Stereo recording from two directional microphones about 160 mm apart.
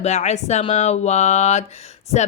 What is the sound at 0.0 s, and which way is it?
A woman's voice, 45° left (ahead or behind).